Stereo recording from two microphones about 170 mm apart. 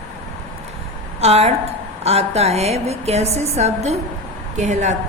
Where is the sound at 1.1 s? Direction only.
40° right (ahead or behind).